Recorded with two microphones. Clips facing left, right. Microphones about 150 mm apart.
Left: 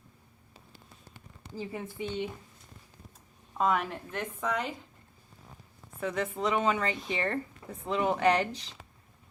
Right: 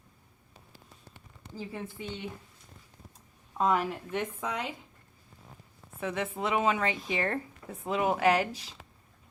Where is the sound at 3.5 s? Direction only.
Centre (ahead or behind).